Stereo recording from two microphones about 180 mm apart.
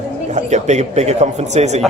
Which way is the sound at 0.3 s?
40° right (ahead or behind).